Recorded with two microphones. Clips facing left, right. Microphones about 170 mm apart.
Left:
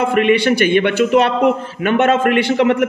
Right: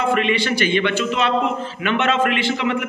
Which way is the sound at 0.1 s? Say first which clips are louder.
Left 6 dB; 50° left (ahead or behind).